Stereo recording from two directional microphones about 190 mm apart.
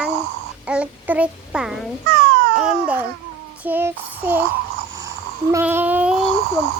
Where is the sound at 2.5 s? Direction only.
5° right (ahead or behind).